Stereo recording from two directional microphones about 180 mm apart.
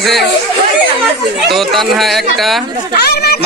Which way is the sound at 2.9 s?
60° left (ahead or behind).